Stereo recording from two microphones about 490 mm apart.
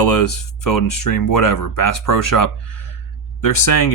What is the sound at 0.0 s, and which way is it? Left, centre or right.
Speech, left.